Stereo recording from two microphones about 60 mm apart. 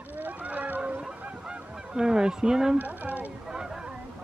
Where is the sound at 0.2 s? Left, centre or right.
Right.